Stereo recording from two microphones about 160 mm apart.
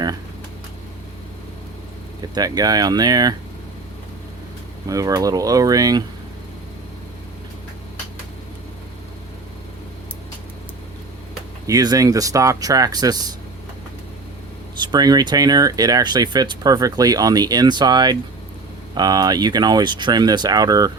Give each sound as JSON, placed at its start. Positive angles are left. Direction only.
{"t": 2.3, "sound": "speech", "side_deg": -25}
{"t": 4.9, "sound": "speech", "side_deg": -20}
{"t": 11.6, "sound": "speech", "side_deg": -20}
{"t": 14.8, "sound": "speech", "side_deg": -25}